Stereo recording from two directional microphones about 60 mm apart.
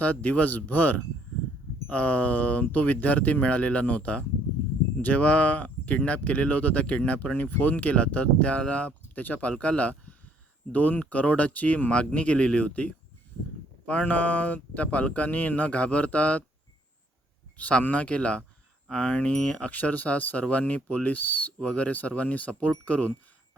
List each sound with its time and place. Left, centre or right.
0.0 s speech: left
17.6 s speech: left